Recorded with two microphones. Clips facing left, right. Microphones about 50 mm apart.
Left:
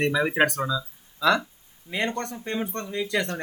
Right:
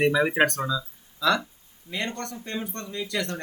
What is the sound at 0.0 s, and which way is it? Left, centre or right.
Speech, centre.